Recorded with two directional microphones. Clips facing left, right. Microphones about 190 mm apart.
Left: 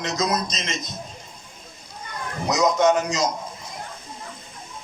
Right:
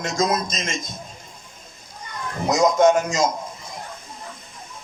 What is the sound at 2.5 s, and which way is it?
Speech, 50° right (ahead or behind).